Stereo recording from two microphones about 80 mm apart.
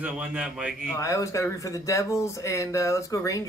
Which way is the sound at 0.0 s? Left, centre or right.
Centre.